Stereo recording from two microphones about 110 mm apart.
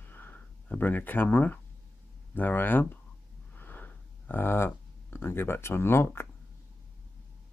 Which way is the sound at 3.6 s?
15° left (ahead or behind).